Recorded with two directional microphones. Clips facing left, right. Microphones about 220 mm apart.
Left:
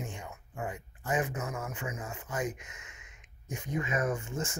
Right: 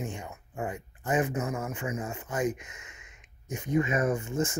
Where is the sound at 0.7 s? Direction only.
30° right (ahead or behind).